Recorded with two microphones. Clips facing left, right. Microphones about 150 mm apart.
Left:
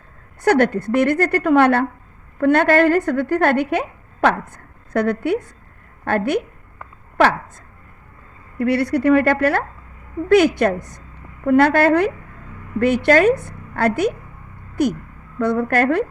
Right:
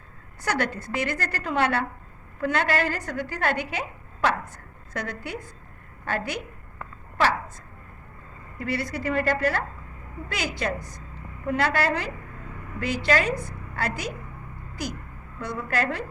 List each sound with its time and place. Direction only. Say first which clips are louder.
0.4 s a woman's voice: left 12 dB; 55° left (ahead or behind)
8.5 s a woman's voice: left 11 dB; 65° left (ahead or behind)